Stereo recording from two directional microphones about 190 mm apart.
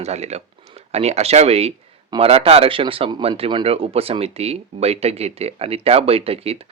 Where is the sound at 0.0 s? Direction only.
35° right (ahead or behind).